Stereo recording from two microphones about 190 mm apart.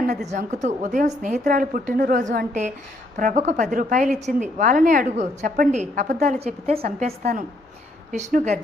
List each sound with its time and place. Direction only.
0.3 s a woman's voice: 40° right (ahead or behind)